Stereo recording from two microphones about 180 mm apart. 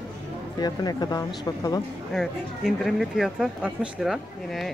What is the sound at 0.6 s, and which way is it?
Speech, 20° left (ahead or behind).